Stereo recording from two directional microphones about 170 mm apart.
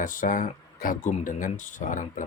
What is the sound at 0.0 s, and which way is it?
Speech, 50° left (ahead or behind).